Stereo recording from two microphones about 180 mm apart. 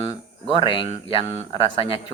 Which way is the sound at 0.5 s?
25° left (ahead or behind).